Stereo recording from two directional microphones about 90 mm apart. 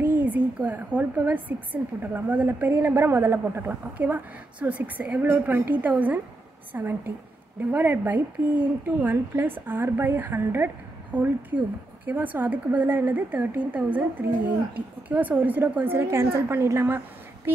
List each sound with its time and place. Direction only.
0.0 s speech: 20° right (ahead or behind)